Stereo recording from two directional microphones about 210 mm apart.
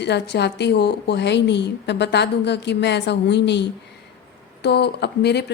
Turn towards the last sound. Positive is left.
turn(degrees=50)  # may be behind; listen again after turning